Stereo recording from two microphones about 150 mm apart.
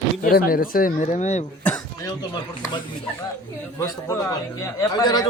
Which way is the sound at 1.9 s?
25° left (ahead or behind).